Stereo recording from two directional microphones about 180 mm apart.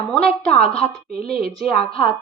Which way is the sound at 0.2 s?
35° left (ahead or behind).